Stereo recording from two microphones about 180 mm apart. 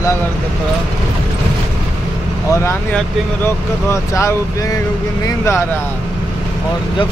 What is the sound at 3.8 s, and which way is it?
Speech, 15° left (ahead or behind).